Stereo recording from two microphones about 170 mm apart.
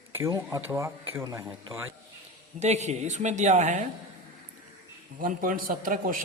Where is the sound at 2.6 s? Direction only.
40° right (ahead or behind).